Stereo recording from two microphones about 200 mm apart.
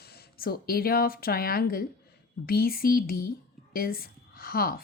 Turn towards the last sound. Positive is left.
turn(degrees=50)  # may be behind; listen again after turning